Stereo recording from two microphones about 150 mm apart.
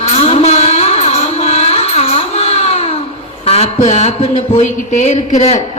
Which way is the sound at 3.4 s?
45° left (ahead or behind).